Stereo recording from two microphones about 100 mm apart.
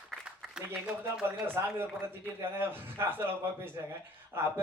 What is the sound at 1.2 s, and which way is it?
A man's voice, 20° right (ahead or behind).